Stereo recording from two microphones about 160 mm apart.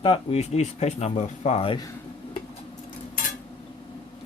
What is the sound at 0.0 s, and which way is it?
Speech, 35° left (ahead or behind).